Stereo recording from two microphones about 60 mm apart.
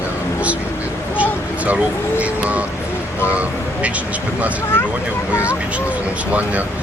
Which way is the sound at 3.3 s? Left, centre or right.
Right.